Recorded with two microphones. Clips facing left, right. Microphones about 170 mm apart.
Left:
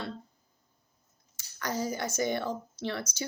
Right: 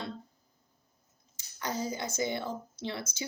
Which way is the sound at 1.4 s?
15° right (ahead or behind).